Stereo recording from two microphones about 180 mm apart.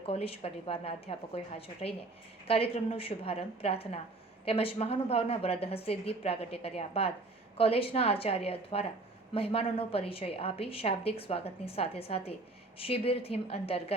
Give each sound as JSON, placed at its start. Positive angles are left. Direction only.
{"t": 0.0, "sound": "a woman's voice", "side_deg": 35}